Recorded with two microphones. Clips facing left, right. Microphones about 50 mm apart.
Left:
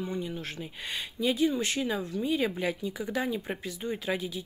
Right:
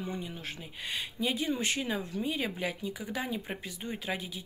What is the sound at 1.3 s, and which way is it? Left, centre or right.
Speech, right.